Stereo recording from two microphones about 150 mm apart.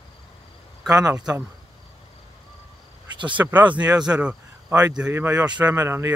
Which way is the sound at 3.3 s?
10° right (ahead or behind).